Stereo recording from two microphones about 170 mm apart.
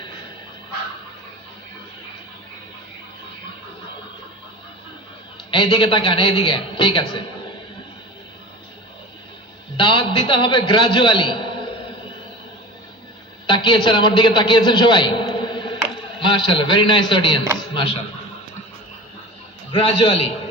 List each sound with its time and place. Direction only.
5.5 s a man's voice: 30° left (ahead or behind)
9.7 s a man's voice: 30° left (ahead or behind)
13.5 s a man's voice: 30° left (ahead or behind)
19.7 s a man's voice: 30° left (ahead or behind)